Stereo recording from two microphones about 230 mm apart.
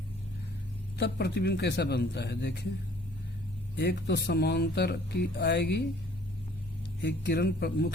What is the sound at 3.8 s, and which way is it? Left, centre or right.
Speech, left.